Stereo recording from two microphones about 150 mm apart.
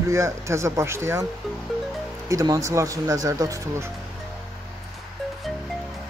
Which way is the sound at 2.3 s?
20° right (ahead or behind).